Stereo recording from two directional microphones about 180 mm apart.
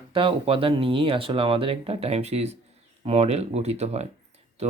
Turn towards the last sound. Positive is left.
turn(degrees=-35)  # may be behind; listen again after turning